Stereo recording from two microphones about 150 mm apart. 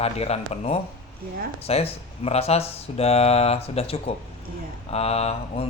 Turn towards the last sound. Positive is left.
turn(degrees=40)  # may be behind; listen again after turning